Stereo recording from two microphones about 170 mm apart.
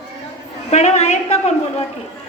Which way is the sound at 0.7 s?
40° left (ahead or behind).